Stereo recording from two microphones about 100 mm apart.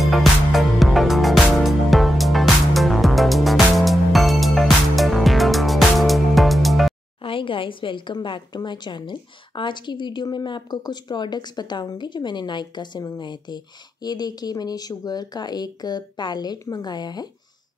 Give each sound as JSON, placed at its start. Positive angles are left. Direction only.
{"t": 0.0, "sound": "music", "side_deg": 0}
{"t": 7.2, "sound": "a woman's voice", "side_deg": 60}